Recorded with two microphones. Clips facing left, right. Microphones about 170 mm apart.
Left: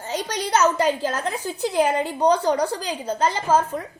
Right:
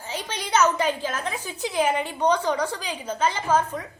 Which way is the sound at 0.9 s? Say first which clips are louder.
Left 4 dB; 40° left (ahead or behind).